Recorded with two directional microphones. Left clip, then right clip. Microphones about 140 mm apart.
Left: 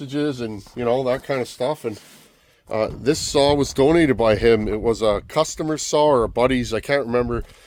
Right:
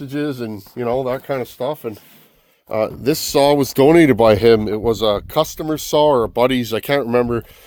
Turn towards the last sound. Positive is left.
turn(degrees=-85)